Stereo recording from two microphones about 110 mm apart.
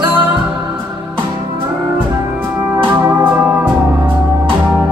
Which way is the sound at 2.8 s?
20° right (ahead or behind).